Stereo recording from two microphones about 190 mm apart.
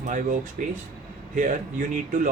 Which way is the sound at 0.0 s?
45° right (ahead or behind).